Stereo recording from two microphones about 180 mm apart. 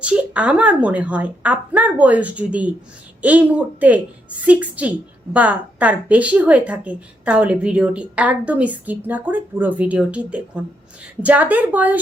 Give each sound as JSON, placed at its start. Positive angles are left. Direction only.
{"t": 0.0, "sound": "a woman's voice", "side_deg": -5}